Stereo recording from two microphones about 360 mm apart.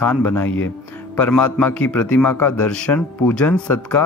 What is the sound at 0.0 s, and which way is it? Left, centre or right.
A man's voice, centre.